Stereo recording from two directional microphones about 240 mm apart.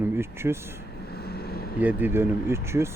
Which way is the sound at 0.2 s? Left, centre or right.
Centre.